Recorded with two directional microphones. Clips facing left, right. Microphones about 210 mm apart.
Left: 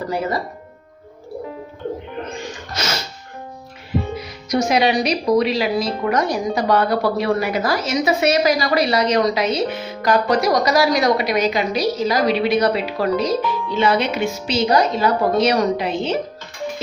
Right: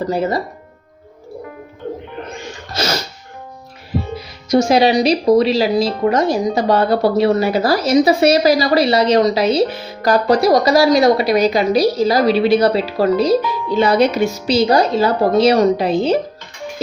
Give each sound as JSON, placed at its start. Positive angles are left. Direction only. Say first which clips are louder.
{"t": 0.1, "sound": "speech", "louder": "right 4 dB", "side_deg": -25}
{"t": 2.7, "sound": "music", "louder": "right 6 dB", "side_deg": -35}
{"t": 4.5, "sound": "speech", "louder": "right 5 dB", "side_deg": -30}